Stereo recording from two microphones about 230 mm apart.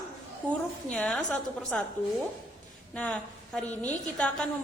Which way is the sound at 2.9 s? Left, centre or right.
Centre.